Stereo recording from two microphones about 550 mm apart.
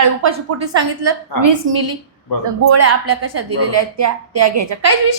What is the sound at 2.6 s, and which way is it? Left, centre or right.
A woman's voice, right.